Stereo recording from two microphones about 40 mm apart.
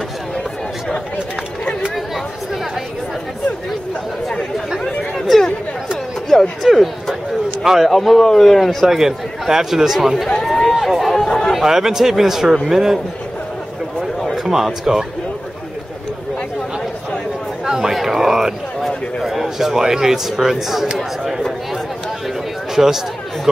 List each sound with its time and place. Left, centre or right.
1.1 s chatter: left
5.1 s chatter: centre
6.6 s speech: centre
7.9 s speech: centre
8.8 s speech: centre
10.7 s run: centre
11.2 s chatter: left
11.6 s speech: centre
14.3 s speech: centre
17.6 s a sound: centre
19.2 s speech: centre
22.8 s speech: centre